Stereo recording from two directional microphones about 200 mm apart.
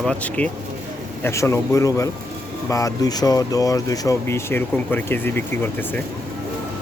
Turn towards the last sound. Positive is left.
turn(degrees=10)  # may be behind; listen again after turning